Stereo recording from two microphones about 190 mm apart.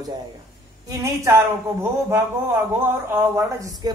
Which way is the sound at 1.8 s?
15° right (ahead or behind).